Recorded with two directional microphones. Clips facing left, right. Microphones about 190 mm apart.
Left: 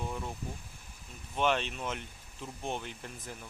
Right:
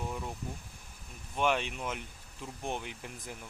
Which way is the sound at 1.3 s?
10° right (ahead or behind).